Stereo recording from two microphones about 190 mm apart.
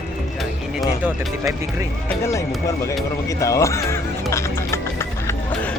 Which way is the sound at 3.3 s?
15° left (ahead or behind).